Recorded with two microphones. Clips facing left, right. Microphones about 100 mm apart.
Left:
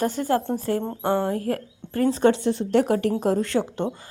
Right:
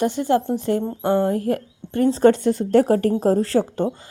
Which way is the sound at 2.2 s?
45° right (ahead or behind).